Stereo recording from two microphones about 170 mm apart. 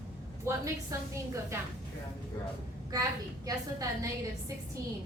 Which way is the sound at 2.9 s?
20° right (ahead or behind).